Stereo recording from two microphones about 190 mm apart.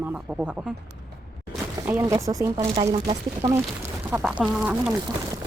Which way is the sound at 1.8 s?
15° right (ahead or behind).